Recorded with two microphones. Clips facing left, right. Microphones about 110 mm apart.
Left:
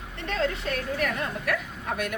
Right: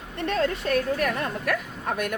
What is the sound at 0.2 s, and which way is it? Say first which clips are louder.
A woman's voice: right 3 dB; 50° right (ahead or behind).